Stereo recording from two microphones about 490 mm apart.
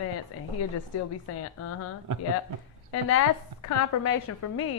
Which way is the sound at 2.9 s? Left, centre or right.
Left.